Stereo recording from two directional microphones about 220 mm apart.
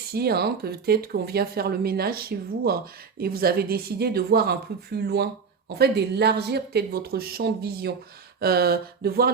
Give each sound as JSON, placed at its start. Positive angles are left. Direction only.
{"t": 0.1, "sound": "speech", "side_deg": -45}